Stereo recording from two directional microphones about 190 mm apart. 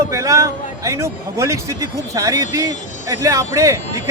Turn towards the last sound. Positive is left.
turn(degrees=-15)  # may be behind; listen again after turning